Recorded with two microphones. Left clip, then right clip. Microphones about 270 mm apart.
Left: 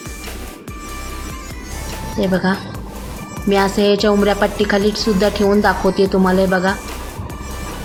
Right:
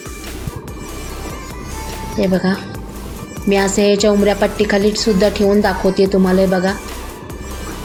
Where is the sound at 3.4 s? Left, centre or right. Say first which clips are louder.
Even; centre.